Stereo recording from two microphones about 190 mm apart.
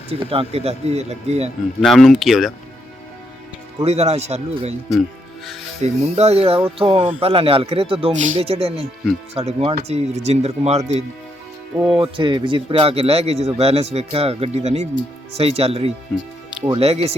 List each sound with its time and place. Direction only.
0.1 s speech: 30° right (ahead or behind)
1.8 s speech: centre (ahead or behind)
3.8 s speech: 35° right (ahead or behind)
5.8 s speech: 35° right (ahead or behind)
11.8 s speech: 25° right (ahead or behind)